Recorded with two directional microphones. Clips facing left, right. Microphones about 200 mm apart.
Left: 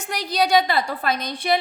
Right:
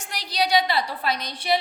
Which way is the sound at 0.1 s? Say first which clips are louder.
Left 4 dB; 50° left (ahead or behind).